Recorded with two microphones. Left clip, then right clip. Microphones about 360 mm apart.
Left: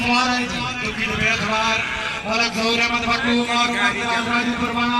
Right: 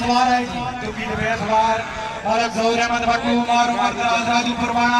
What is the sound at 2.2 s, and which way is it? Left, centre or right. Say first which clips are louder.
A man's voice: right 3 dB; right.